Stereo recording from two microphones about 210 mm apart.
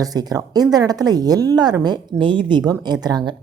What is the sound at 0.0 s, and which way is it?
Speech, 20° right (ahead or behind).